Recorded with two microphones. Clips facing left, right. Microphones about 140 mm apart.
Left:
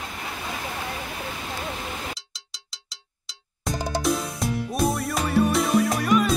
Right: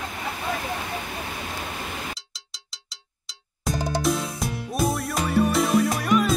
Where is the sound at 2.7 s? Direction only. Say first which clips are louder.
Even; centre (ahead or behind).